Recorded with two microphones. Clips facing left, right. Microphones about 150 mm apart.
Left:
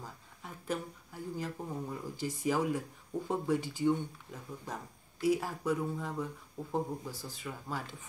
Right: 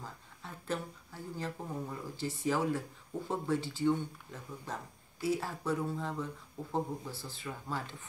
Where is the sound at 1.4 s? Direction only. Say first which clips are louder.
Right 2 dB; 10° left (ahead or behind).